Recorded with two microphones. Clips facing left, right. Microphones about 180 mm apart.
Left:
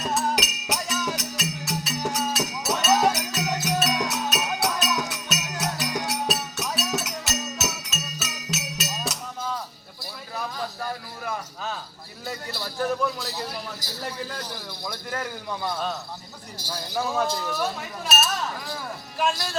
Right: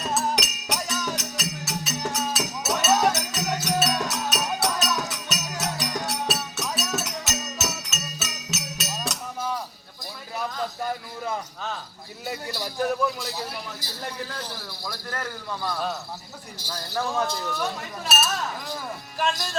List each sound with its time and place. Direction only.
0.1 s music: centre (ahead or behind)
12.2 s a sound: 15° right (ahead or behind)
13.1 s a sound: centre (ahead or behind)
14.8 s a man's voice: 15° left (ahead or behind)
18.1 s chink: centre (ahead or behind)
19.1 s speech: centre (ahead or behind)